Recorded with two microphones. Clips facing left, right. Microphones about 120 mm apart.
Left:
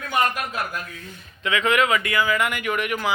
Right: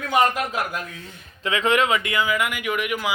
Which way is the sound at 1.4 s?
30° right (ahead or behind).